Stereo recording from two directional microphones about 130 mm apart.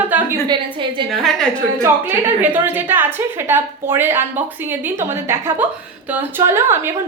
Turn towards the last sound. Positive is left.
turn(degrees=-20)  # may be behind; listen again after turning